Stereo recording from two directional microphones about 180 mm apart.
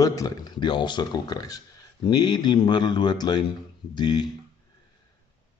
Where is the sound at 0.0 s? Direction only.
20° left (ahead or behind).